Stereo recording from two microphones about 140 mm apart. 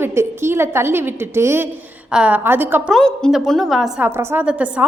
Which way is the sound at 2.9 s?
5° left (ahead or behind).